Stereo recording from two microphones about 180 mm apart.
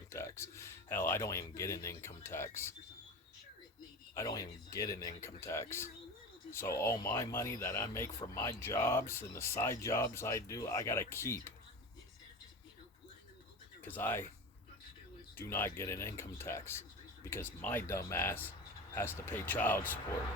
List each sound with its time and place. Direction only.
0.1 s speech: 15° left (ahead or behind)
4.1 s speech: 20° left (ahead or behind)
13.8 s speech: 10° left (ahead or behind)
15.4 s speech: 10° left (ahead or behind)